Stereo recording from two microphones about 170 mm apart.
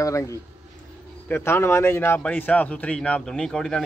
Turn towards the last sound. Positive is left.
turn(degrees=5)  # may be behind; listen again after turning